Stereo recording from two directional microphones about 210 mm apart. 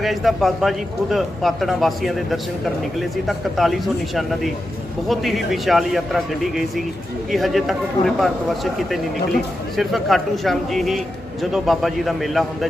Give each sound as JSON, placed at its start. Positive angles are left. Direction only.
{"t": 0.0, "sound": "a man's voice", "side_deg": 0}